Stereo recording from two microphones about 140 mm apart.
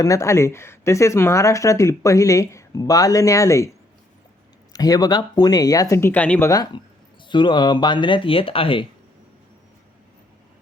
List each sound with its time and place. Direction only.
0.0 s speech: 20° left (ahead or behind)
4.7 s speech: 25° left (ahead or behind); by 6.5 s 10° left (ahead or behind)
6.5 s speech: 30° left (ahead or behind)